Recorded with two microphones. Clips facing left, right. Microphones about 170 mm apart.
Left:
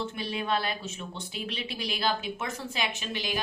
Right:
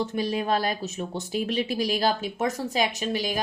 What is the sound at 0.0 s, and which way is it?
A woman's voice, 40° right (ahead or behind).